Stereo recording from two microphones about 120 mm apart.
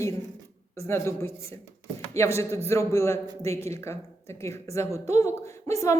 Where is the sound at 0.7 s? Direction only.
20° left (ahead or behind).